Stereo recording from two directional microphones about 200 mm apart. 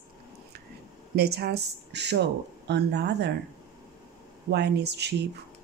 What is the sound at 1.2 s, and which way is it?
Speech, 55° right (ahead or behind).